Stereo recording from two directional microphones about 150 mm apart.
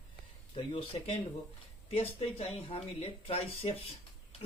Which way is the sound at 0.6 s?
35° left (ahead or behind).